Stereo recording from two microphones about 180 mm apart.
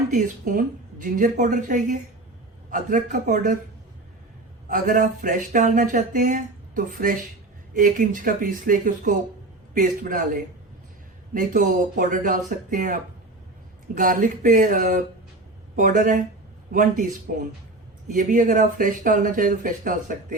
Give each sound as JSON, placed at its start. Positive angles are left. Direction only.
{"t": 0.1, "sound": "speech", "side_deg": -45}
{"t": 4.7, "sound": "speech", "side_deg": -50}
{"t": 11.3, "sound": "speech", "side_deg": -45}